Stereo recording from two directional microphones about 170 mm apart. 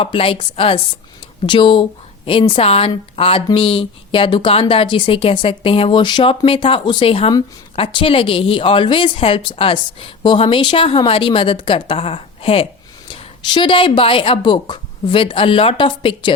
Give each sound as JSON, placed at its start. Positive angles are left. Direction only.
{"t": 0.0, "sound": "a woman's voice", "side_deg": 30}